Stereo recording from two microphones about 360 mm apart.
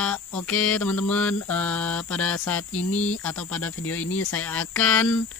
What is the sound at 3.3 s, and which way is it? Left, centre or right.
Mantra, centre.